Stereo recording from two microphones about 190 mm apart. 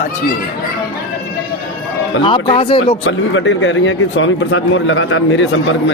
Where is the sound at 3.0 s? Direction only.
75° left (ahead or behind).